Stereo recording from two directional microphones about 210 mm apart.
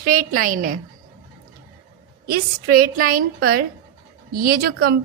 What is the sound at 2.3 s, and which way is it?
A woman's voice, 45° right (ahead or behind).